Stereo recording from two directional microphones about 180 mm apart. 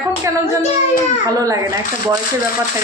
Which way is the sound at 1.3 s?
20° right (ahead or behind).